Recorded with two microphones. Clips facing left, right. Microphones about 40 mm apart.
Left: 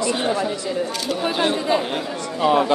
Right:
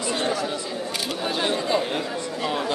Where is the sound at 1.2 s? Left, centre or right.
Centre.